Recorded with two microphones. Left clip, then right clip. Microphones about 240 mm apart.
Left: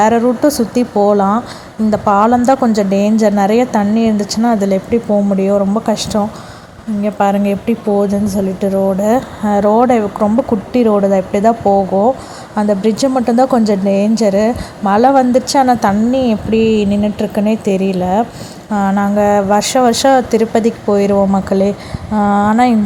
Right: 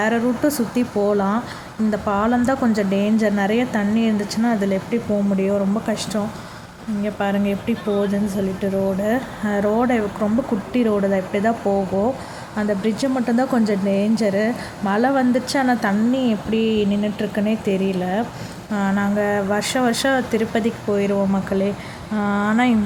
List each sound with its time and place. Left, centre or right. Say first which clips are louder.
0.0 s a woman's voice: left 9 dB; centre